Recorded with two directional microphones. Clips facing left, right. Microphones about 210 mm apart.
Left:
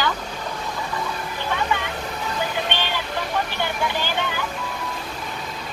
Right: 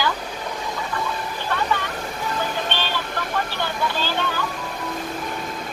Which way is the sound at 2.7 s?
15° left (ahead or behind).